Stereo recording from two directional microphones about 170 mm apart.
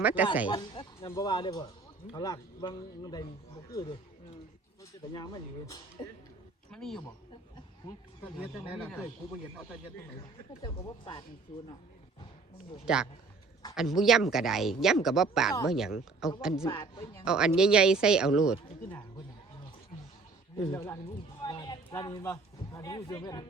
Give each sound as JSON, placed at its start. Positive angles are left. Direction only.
{"t": 0.0, "sound": "speech", "side_deg": -10}
{"t": 0.4, "sound": "a sound", "side_deg": 30}
{"t": 1.1, "sound": "a man's voice", "side_deg": 25}
{"t": 5.1, "sound": "a man's voice", "side_deg": 25}
{"t": 6.7, "sound": "speech", "side_deg": 5}
{"t": 10.6, "sound": "a man's voice", "side_deg": 30}
{"t": 12.8, "sound": "speech", "side_deg": -5}
{"t": 16.6, "sound": "a man's voice", "side_deg": 20}
{"t": 17.2, "sound": "speech", "side_deg": -5}
{"t": 20.7, "sound": "a man's voice", "side_deg": 20}
{"t": 21.4, "sound": "a sound", "side_deg": 25}
{"t": 22.2, "sound": "a man's voice", "side_deg": 20}